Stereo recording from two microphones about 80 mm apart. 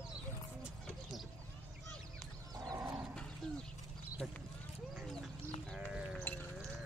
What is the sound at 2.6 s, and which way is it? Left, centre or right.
Roaring cats, right.